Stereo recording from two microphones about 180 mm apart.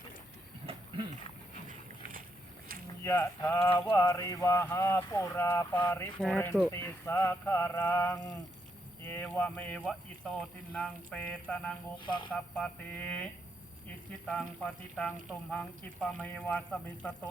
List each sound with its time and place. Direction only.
3.0 s mantra: 15° left (ahead or behind)
12.0 s speech: 25° left (ahead or behind)
12.5 s mantra: 5° left (ahead or behind)
14.3 s mantra: 5° left (ahead or behind)